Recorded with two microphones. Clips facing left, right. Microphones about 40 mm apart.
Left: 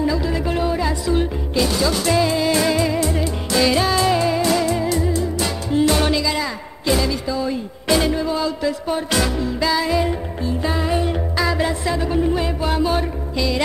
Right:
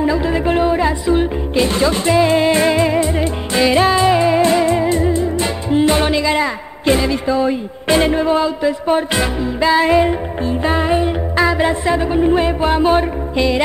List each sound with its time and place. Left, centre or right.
0.0 s music: right
1.5 s music: right
8.5 s music: right
9.7 s music: right
11.4 s music: right